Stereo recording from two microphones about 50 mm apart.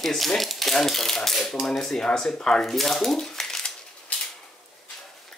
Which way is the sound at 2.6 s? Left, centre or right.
Centre.